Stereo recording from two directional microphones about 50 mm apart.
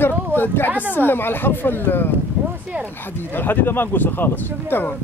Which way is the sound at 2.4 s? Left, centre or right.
Right.